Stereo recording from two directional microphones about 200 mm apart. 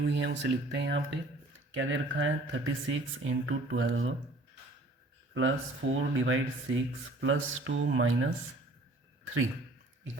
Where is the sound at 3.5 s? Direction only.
80° right.